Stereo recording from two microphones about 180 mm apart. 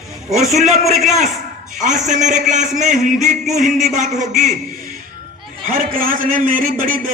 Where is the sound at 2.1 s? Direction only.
40° right (ahead or behind).